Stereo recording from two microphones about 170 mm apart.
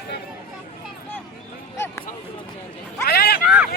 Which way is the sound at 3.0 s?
65° left (ahead or behind).